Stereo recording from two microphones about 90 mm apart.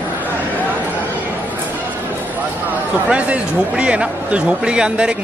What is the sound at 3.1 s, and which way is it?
Speech, 15° right (ahead or behind).